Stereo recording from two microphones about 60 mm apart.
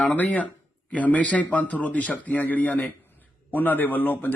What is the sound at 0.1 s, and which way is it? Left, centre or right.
A man's voice, left.